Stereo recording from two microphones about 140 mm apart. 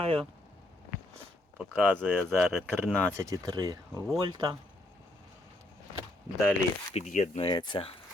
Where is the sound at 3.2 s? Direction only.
25° right (ahead or behind).